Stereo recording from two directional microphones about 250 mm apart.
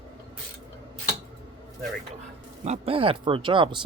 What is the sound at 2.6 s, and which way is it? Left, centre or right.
Speech, right.